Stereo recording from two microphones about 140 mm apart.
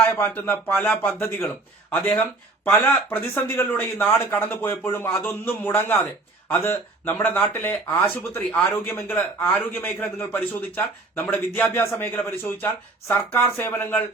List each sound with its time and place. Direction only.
0.0 s speech: 15° left (ahead or behind)